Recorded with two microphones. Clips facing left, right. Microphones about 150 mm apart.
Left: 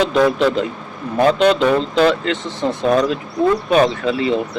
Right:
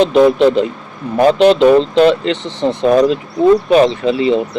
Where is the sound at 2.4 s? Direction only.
10° left (ahead or behind).